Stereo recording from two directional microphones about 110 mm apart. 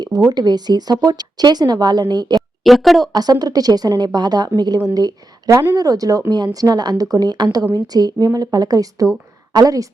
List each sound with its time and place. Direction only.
0.3 s speech: 40° right (ahead or behind)
2.6 s a woman's voice: centre (ahead or behind)
3.1 s speech: 35° right (ahead or behind)